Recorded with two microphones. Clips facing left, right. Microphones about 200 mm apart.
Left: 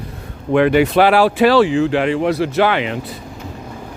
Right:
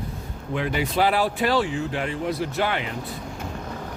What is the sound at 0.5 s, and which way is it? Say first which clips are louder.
Speech: left 12 dB; 70° left (ahead or behind).